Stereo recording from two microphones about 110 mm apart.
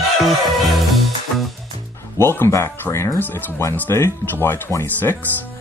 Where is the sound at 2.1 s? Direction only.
20° left (ahead or behind).